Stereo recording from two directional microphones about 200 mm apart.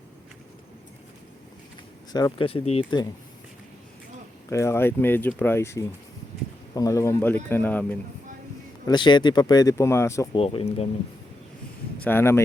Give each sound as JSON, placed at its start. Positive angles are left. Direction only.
{"t": 2.1, "sound": "speech", "side_deg": 25}
{"t": 4.4, "sound": "speech", "side_deg": 15}
{"t": 8.9, "sound": "speech", "side_deg": 20}
{"t": 10.3, "sound": "speech", "side_deg": 25}
{"t": 11.9, "sound": "speech", "side_deg": 10}